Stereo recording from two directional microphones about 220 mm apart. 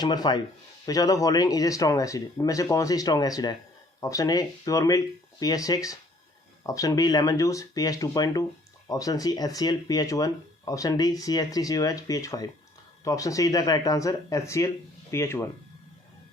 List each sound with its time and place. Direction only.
0.0 s speech: 20° left (ahead or behind)